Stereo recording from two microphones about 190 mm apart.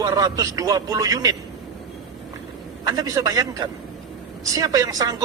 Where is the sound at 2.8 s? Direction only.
20° right (ahead or behind).